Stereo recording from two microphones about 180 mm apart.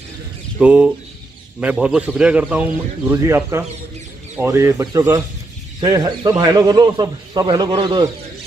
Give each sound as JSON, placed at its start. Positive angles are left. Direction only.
{"t": 0.6, "sound": "chicken", "side_deg": -5}
{"t": 1.6, "sound": "speech", "side_deg": -5}